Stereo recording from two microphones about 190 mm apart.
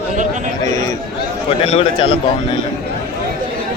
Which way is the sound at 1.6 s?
30° left (ahead or behind).